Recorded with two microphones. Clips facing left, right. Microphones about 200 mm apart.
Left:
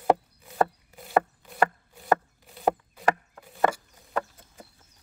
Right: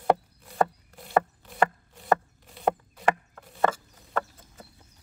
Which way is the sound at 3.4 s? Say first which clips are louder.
Left 1 dB; 10° left (ahead or behind).